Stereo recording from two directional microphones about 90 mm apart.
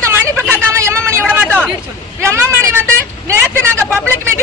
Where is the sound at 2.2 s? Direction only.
30° right (ahead or behind).